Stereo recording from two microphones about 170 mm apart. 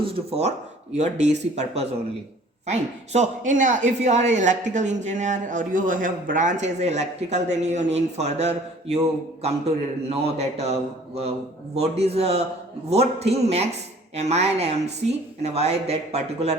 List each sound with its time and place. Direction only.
0.0 s a man's voice: 35° right (ahead or behind)